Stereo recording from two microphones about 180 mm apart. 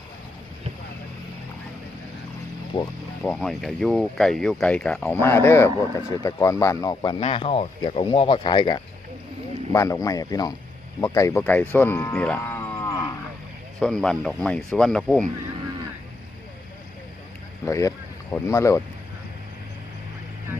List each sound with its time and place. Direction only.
2.7 s speech: 30° left (ahead or behind)
3.2 s speech: 5° left (ahead or behind)
13.7 s speech: 5° left (ahead or behind)
17.7 s speech: 15° left (ahead or behind)